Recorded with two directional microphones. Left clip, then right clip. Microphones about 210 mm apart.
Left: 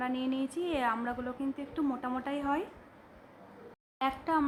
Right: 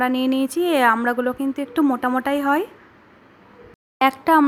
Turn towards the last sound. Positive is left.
turn(degrees=-35)  # may be behind; listen again after turning